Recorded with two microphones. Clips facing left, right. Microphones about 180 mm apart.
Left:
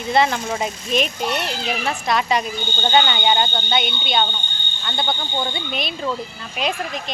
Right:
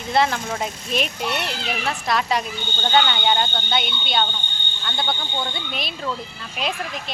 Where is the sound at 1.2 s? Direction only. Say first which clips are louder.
Left 2 dB; 40° left (ahead or behind).